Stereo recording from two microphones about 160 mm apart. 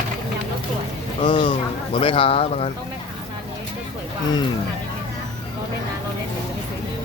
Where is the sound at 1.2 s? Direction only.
30° left (ahead or behind).